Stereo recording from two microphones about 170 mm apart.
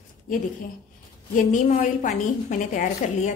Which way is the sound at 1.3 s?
50° left (ahead or behind).